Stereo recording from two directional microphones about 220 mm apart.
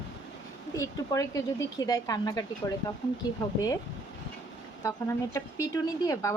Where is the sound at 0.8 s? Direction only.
15° left (ahead or behind).